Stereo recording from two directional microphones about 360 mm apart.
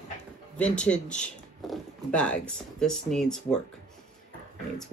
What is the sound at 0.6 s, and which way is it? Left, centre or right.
Speech, centre.